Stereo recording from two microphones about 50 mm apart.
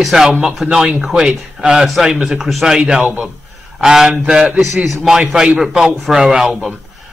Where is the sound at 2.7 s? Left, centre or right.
Centre.